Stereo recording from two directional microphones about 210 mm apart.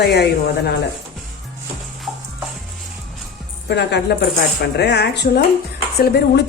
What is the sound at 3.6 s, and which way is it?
A woman's voice, 55° left (ahead or behind).